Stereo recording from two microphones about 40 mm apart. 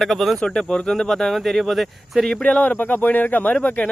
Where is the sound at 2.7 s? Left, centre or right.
Left.